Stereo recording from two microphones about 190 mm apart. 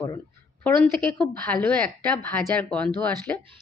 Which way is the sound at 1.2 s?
5° left (ahead or behind).